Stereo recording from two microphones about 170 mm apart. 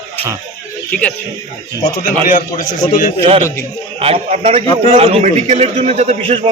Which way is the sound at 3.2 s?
35° right (ahead or behind).